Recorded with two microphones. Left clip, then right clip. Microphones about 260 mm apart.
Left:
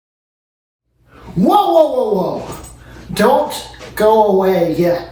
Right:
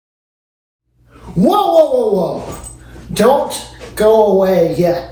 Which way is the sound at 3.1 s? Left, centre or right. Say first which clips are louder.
Right 1 dB; centre.